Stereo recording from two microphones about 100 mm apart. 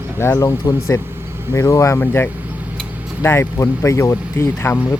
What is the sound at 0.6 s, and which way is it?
Speech, 40° left (ahead or behind).